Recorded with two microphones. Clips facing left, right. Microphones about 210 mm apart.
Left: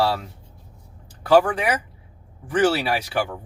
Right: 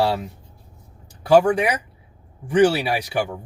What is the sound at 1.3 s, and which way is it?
Speech, 15° right (ahead or behind).